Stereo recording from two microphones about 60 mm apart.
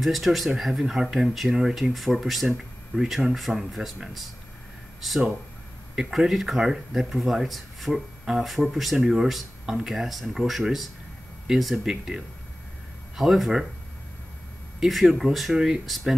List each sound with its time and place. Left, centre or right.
0.0 s speech: centre
14.8 s speech: centre